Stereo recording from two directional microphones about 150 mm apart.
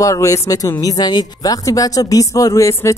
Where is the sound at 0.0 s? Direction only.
20° left (ahead or behind).